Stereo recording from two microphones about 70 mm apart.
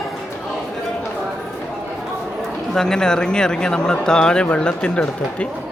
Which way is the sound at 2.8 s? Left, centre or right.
Centre.